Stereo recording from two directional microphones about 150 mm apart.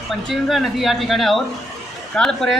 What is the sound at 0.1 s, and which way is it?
A woman's voice, centre (ahead or behind).